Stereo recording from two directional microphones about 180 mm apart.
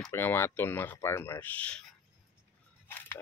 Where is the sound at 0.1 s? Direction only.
15° left (ahead or behind).